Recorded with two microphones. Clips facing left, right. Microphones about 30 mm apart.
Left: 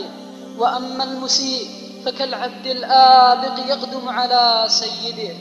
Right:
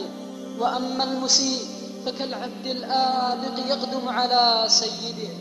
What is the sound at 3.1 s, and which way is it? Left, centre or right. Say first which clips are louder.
Music: left 14 dB; left.